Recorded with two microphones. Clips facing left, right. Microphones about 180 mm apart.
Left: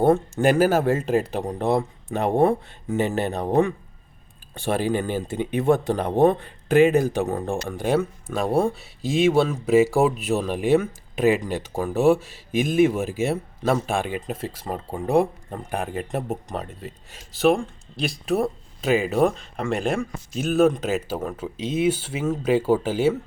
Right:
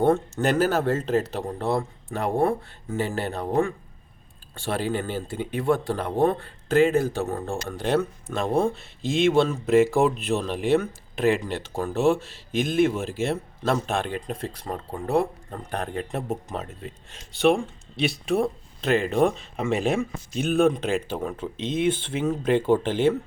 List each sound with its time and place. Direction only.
0.0 s speech: 10° left (ahead or behind)